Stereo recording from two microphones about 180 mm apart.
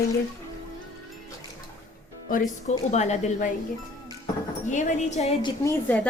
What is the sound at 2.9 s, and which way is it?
Speech, 40° left (ahead or behind).